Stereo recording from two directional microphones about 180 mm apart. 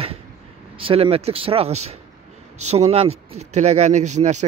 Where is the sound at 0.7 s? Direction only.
30° right (ahead or behind).